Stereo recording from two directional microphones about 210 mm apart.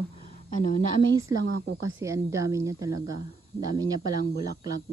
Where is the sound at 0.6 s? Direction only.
30° left (ahead or behind).